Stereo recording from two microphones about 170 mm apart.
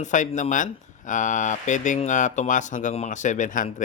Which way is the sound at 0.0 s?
45° left (ahead or behind).